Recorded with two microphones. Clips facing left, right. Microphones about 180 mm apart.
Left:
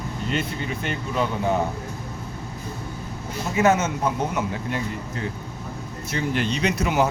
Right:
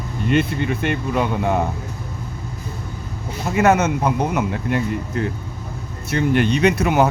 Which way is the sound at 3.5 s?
65° right (ahead or behind).